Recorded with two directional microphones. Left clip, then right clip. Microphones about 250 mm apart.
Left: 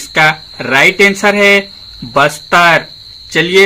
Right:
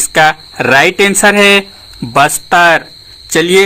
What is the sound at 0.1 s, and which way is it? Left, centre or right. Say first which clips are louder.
Speech: right 1 dB; right.